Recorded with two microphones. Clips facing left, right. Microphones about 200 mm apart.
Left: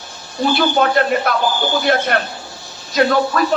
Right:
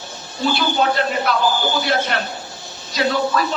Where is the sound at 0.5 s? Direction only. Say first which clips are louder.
Left 4 dB; 50° left (ahead or behind).